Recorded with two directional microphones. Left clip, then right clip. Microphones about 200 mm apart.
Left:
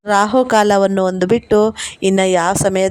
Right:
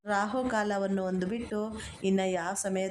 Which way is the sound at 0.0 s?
45° left (ahead or behind).